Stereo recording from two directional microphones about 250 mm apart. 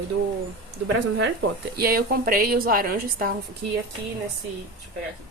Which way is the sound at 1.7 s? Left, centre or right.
Right.